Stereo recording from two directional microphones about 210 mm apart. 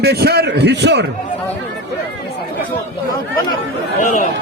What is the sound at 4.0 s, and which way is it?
Speech, 35° left (ahead or behind).